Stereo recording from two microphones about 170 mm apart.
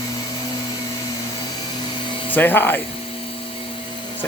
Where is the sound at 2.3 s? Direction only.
10° left (ahead or behind).